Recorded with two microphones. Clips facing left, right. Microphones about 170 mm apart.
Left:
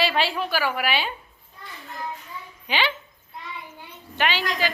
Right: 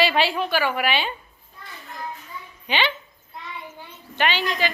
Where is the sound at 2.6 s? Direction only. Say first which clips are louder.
Right 1 dB; 5° left (ahead or behind).